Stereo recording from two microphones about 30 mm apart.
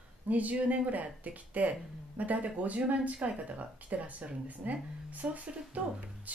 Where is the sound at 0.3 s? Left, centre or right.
Right.